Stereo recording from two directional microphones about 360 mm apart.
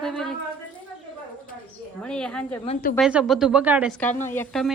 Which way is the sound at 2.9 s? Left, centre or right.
Centre.